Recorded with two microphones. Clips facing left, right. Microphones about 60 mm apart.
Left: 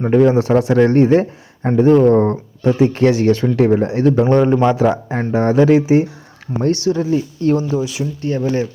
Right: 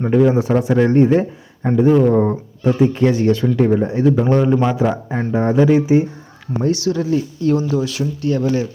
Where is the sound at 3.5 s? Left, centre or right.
Left.